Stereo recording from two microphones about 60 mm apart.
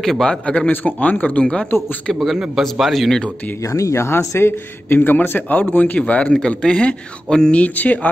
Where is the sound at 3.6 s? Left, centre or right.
Left; by 7.6 s centre.